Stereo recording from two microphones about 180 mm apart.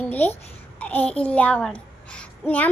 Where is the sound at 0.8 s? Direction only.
5° left (ahead or behind).